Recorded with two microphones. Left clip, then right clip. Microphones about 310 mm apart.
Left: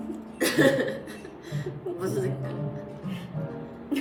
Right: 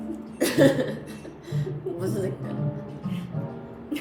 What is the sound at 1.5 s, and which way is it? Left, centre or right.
Chuckle, centre.